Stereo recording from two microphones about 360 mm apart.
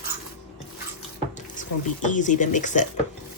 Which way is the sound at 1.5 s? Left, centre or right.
Left.